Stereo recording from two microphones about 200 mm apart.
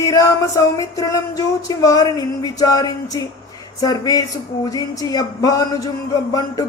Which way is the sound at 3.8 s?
20° left (ahead or behind).